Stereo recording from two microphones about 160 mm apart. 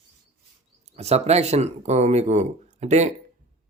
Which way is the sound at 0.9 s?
40° right (ahead or behind).